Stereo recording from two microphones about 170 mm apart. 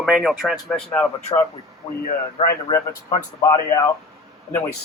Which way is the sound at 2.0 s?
55° left (ahead or behind).